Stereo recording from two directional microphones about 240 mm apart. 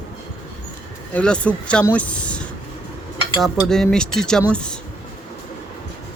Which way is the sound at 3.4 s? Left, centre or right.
Centre.